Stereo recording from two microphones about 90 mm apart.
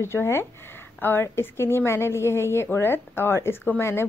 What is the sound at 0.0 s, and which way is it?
A woman's voice, 30° left (ahead or behind).